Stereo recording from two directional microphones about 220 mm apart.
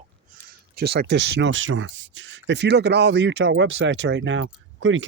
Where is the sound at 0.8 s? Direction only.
45° right (ahead or behind).